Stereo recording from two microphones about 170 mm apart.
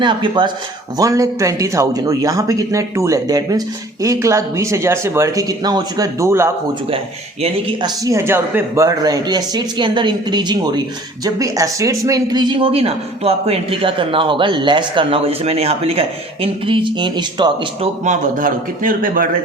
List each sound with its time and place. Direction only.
0.0 s speech: 25° right (ahead or behind)
8.0 s a man's voice: 15° right (ahead or behind)
18.0 s a man's voice: 50° right (ahead or behind)